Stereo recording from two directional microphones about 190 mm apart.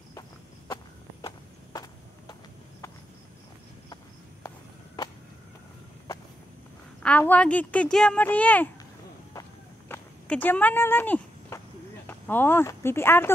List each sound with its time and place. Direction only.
1.2 s a sound: 20° left (ahead or behind)
7.0 s a woman's voice: 10° left (ahead or behind)
9.3 s walk: 20° left (ahead or behind)
10.2 s speech: 10° left (ahead or behind)